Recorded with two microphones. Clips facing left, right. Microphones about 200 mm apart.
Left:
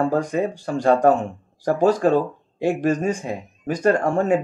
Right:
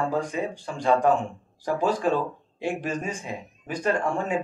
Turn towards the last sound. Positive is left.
turn(degrees=40)  # may be behind; listen again after turning